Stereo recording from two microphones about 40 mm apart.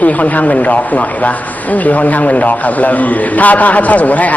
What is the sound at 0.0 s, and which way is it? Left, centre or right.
A man's voice, left.